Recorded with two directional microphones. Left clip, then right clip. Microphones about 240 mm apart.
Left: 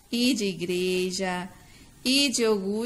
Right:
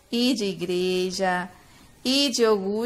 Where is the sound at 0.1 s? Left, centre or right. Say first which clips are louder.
Right 2 dB; centre.